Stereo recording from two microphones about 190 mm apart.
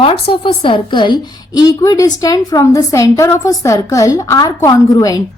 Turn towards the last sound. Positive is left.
turn(degrees=20)  # may be behind; listen again after turning